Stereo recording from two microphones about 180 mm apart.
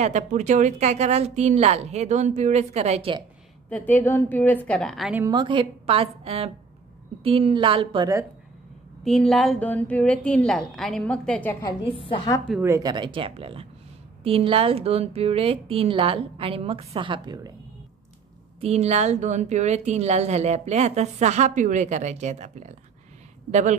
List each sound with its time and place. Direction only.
0.0 s a woman's voice: 40° right (ahead or behind)
3.7 s a woman's voice: 10° left (ahead or behind)
5.2 s a woman's voice: 25° right (ahead or behind)
9.0 s a woman's voice: centre (ahead or behind)
11.9 s a woman's voice: 30° left (ahead or behind)
12.6 s a woman's voice: 20° right (ahead or behind)
18.6 s a woman's voice: 35° right (ahead or behind)